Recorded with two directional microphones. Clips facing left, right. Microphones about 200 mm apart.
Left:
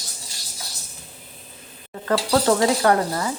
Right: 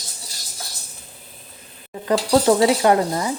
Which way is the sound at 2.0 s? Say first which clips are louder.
Right 3 dB; 15° right (ahead or behind).